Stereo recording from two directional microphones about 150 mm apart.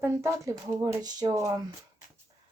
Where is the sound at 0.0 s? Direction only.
20° right (ahead or behind).